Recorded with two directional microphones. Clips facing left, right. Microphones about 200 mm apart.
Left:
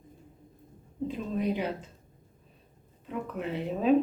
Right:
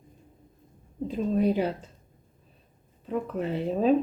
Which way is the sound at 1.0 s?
35° right (ahead or behind).